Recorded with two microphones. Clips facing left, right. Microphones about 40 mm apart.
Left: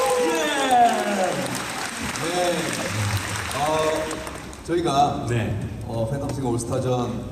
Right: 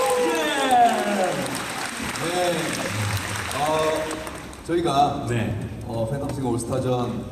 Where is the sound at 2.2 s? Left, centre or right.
Centre.